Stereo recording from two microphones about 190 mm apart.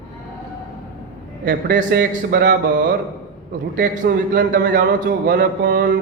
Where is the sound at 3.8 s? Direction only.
65° right (ahead or behind).